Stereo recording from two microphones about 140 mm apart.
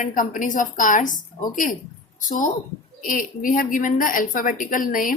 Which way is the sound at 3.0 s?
80° left.